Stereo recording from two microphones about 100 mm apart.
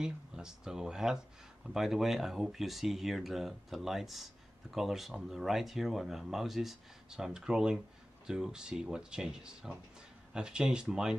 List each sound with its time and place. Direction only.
0.0 s speech: 5° right (ahead or behind)